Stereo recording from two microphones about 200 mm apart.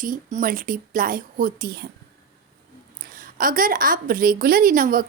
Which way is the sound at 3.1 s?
45° right (ahead or behind).